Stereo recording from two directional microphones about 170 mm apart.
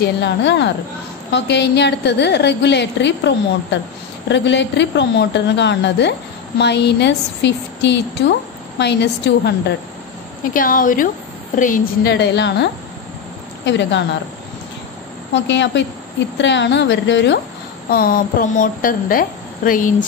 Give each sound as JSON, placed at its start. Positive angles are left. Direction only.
{"t": 0.0, "sound": "a woman's voice", "side_deg": 90}
{"t": 10.5, "sound": "a woman's voice", "side_deg": 55}
{"t": 12.1, "sound": "a woman's voice", "side_deg": 90}
{"t": 13.7, "sound": "a woman's voice", "side_deg": 90}
{"t": 15.3, "sound": "a woman's voice", "side_deg": 90}
{"t": 17.8, "sound": "a woman's voice", "side_deg": 60}